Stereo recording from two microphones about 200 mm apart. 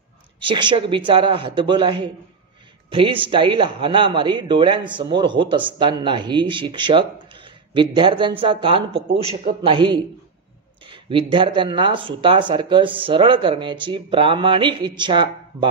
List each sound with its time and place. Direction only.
0.4 s speech: 25° right (ahead or behind)